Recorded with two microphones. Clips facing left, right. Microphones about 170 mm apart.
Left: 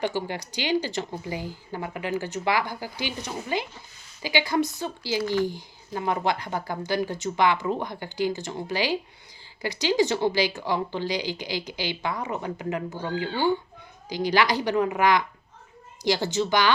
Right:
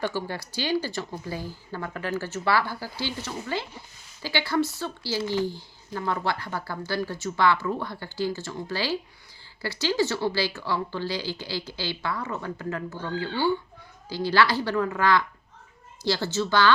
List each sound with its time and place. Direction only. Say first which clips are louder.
0.0 s speech: left 2 dB; 15° left (ahead or behind)
5.2 s speech: left 2 dB; 15° right (ahead or behind)
5.5 s speech: left 1 dB; 20° left (ahead or behind)